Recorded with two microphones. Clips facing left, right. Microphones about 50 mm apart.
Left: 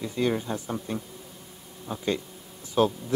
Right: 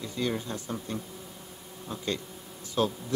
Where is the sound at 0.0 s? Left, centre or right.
Centre.